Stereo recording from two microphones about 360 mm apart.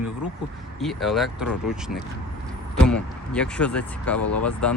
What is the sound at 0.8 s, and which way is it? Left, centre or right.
Speech, centre.